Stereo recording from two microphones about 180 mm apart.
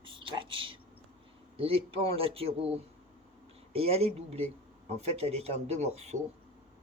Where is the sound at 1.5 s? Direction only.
30° right (ahead or behind).